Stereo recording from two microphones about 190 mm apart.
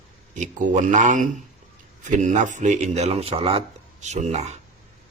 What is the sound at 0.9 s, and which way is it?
Speech, 40° right (ahead or behind).